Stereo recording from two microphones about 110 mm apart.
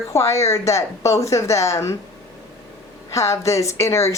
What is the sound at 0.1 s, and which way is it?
A woman's voice, 25° left (ahead or behind).